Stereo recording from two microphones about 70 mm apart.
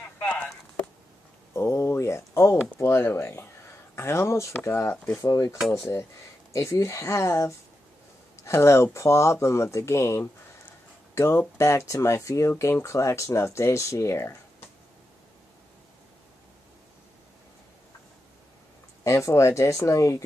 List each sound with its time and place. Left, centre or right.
1.5 s speech: left
5.1 s speech: left
5.7 s speech: left
19.0 s speech: left